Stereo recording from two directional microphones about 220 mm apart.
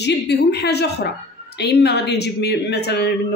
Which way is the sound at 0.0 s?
50° left (ahead or behind).